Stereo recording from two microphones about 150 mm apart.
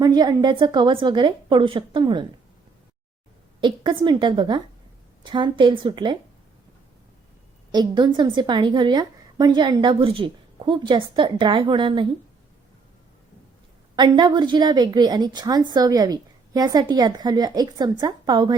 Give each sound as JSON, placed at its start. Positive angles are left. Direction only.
{"t": 0.0, "sound": "a woman's voice", "side_deg": -25}
{"t": 3.6, "sound": "a woman's voice", "side_deg": -30}
{"t": 7.7, "sound": "a woman's voice", "side_deg": -30}
{"t": 13.9, "sound": "a woman's voice", "side_deg": -30}